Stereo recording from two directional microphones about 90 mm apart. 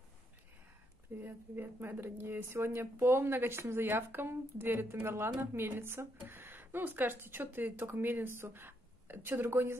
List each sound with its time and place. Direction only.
1.2 s speech: 25° right (ahead or behind)